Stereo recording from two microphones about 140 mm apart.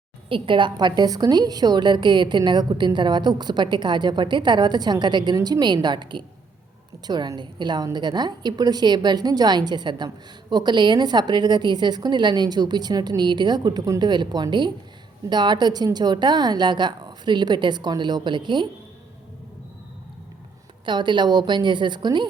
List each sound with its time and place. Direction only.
0.3 s a woman's voice: 40° right (ahead or behind)
20.8 s a woman's voice: 35° right (ahead or behind)